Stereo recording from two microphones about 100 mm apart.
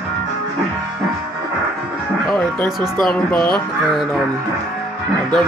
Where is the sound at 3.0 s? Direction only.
5° left (ahead or behind).